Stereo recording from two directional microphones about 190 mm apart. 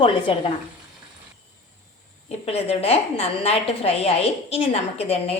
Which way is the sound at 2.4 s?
30° left (ahead or behind).